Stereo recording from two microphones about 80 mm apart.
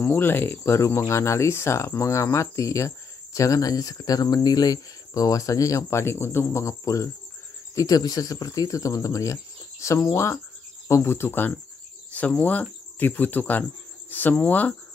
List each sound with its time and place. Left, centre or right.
0.0 s speech: left
12.1 s cricket: centre
14.1 s speech: left